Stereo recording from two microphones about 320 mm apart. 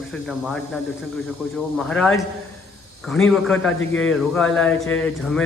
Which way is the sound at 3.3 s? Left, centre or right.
Centre.